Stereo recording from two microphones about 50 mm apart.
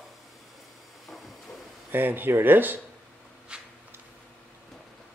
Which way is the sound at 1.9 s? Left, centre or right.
Right.